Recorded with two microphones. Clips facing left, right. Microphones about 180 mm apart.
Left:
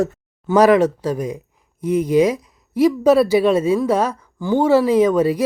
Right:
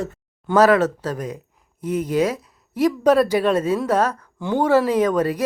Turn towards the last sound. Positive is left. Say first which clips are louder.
# left 4 dB
turn(degrees=10)  # may be behind; listen again after turning